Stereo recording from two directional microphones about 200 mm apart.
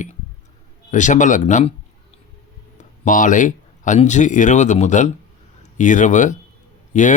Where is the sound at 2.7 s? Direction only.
40° left (ahead or behind).